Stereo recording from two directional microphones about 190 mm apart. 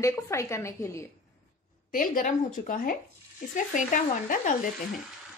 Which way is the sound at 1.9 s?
45° left (ahead or behind).